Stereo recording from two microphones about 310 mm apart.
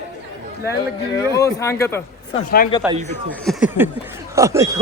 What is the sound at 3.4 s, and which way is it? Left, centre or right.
A man's voice, centre.